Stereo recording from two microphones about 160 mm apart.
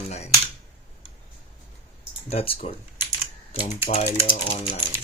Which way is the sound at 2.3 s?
35° left (ahead or behind).